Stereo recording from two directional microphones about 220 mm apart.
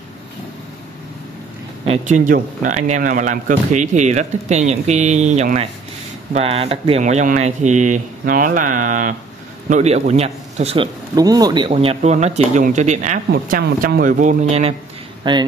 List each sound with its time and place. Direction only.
1.9 s a man's voice: 35° right (ahead or behind)
11.1 s a man's voice: 15° right (ahead or behind); by 13.2 s 35° right (ahead or behind)
13.3 s a man's voice: 45° right (ahead or behind); by 15.4 s 20° right (ahead or behind)